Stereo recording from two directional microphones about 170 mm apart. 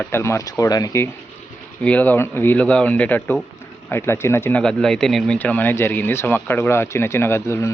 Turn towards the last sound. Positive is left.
turn(degrees=15)  # may be behind; listen again after turning